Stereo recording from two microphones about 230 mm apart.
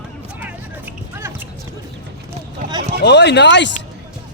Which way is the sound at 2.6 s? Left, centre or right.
Right.